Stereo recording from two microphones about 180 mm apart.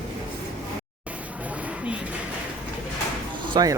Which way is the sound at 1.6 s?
5° right (ahead or behind).